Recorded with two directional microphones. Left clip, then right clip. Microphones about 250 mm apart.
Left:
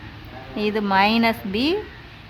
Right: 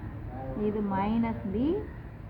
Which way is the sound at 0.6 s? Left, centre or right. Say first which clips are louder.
Left 12 dB; left.